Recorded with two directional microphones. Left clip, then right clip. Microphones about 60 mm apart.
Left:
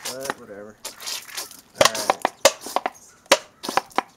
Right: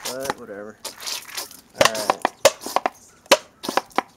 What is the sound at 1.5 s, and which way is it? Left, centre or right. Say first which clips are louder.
Wood: even; centre.